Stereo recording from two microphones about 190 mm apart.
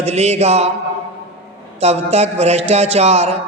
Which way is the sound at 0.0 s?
35° right (ahead or behind).